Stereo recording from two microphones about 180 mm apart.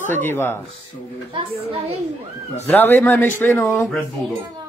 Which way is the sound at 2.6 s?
10° left (ahead or behind).